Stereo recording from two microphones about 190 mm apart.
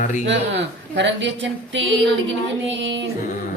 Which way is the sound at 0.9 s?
70° right (ahead or behind).